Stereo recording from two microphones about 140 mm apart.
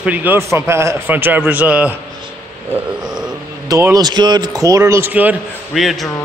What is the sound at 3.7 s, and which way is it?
A man's voice, 25° right (ahead or behind).